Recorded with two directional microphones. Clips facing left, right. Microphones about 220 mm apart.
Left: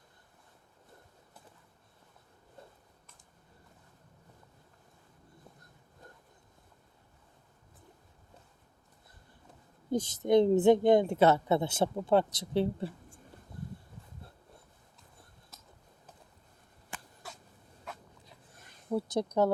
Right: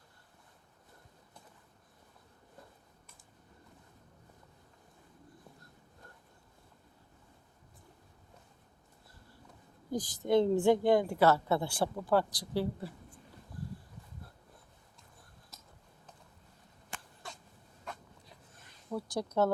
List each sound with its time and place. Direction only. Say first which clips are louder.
9.9 s a woman's voice: left 3 dB; 25° left (ahead or behind)
17.2 s a sound: right 1 dB; 5° left (ahead or behind)
18.9 s speech: left 3 dB; 20° left (ahead or behind)